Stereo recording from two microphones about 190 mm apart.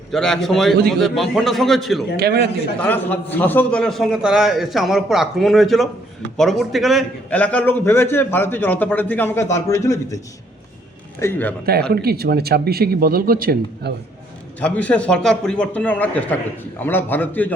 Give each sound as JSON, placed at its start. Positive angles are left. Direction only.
{"t": 0.1, "sound": "a man's voice", "side_deg": 0}
{"t": 2.1, "sound": "speech", "side_deg": -60}
{"t": 2.7, "sound": "a man's voice", "side_deg": 10}
{"t": 11.2, "sound": "a man's voice", "side_deg": 10}
{"t": 11.9, "sound": "speech", "side_deg": -55}
{"t": 14.6, "sound": "a man's voice", "side_deg": 5}